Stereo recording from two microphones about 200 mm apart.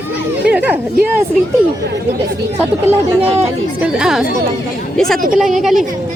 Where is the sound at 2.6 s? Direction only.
10° right (ahead or behind).